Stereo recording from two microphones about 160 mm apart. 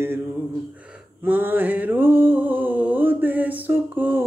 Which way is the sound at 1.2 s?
10° right (ahead or behind).